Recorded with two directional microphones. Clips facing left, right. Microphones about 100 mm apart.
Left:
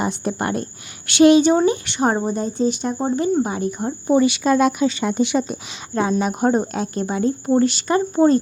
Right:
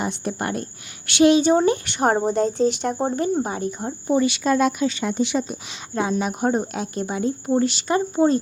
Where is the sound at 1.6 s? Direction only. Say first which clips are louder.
Left 1 dB; 50° right (ahead or behind).